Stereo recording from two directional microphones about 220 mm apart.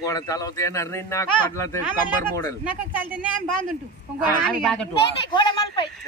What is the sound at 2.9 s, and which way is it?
Speech, 10° right (ahead or behind).